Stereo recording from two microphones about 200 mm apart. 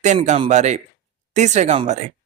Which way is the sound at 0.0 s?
35° right (ahead or behind).